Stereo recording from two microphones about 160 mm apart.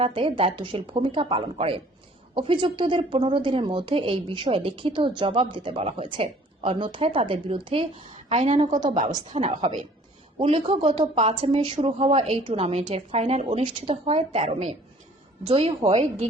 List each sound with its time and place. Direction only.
0.0 s a woman's voice: 35° right (ahead or behind)
8.1 s a woman's voice: 50° right (ahead or behind); by 8.9 s 30° right (ahead or behind)
9.0 s a woman's voice: 50° right (ahead or behind)